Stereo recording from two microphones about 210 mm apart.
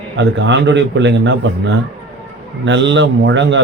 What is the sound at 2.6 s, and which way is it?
Speech, 60° right (ahead or behind).